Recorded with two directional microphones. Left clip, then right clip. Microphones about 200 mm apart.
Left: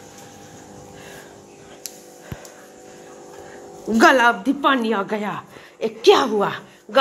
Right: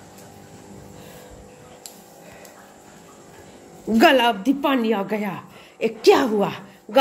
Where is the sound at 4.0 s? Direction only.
25° right (ahead or behind).